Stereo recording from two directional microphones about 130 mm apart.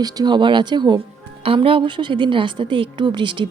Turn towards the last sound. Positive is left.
turn(degrees=-40)  # may be behind; listen again after turning